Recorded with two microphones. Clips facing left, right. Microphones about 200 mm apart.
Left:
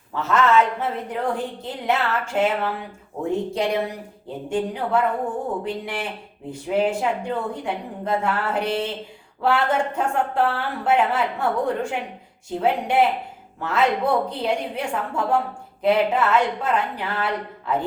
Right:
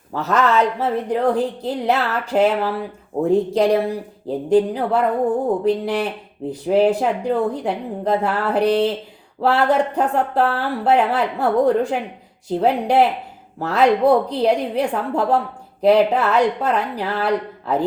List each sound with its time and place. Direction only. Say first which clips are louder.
0.1 s speech: right 1 dB; 40° right (ahead or behind)